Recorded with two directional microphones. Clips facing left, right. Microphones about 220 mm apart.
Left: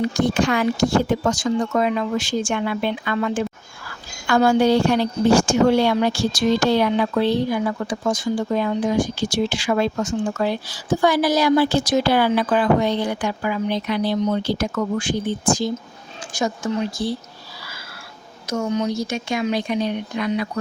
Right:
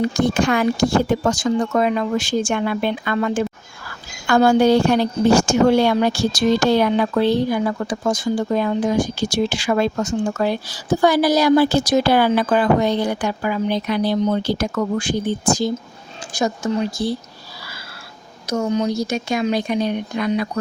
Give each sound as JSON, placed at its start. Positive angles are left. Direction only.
{"t": 0.0, "sound": "a woman's voice", "side_deg": -50}
{"t": 18.4, "sound": "a woman's voice", "side_deg": -35}